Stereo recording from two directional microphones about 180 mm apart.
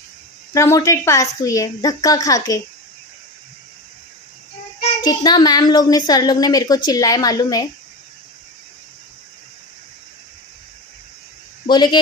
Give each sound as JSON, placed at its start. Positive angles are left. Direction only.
{"t": 0.5, "sound": "a woman's voice", "side_deg": 15}
{"t": 4.7, "sound": "child singing", "side_deg": 30}
{"t": 5.2, "sound": "a woman's voice", "side_deg": 20}
{"t": 11.6, "sound": "speech", "side_deg": 25}